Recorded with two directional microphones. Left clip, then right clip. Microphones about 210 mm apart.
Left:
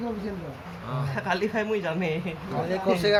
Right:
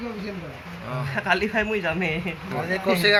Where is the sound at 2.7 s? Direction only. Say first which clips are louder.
Right 3 dB; 10° left (ahead or behind).